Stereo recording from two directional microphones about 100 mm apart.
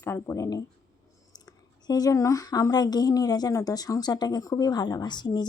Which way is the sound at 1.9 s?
35° left (ahead or behind).